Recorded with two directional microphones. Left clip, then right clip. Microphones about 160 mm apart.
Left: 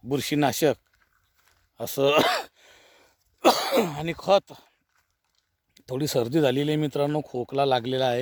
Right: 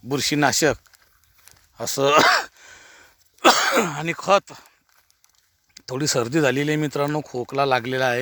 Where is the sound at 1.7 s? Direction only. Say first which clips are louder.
Right 4 dB; 20° left (ahead or behind).